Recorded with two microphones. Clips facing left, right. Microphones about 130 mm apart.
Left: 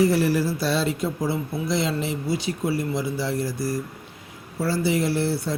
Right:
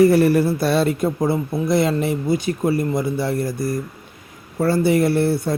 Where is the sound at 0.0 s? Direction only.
55° right (ahead or behind).